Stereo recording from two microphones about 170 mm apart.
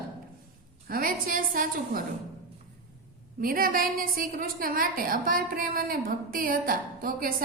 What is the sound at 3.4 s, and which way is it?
A woman's voice, 55° right (ahead or behind).